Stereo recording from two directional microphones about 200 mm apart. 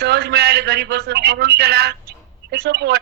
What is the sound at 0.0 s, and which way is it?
A man's voice, 55° right (ahead or behind).